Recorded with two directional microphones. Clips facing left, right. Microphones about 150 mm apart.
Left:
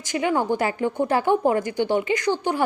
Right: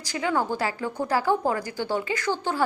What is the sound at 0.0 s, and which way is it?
A woman's voice, 20° left (ahead or behind).